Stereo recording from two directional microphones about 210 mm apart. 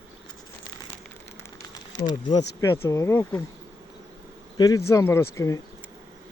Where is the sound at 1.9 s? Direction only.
20° left (ahead or behind).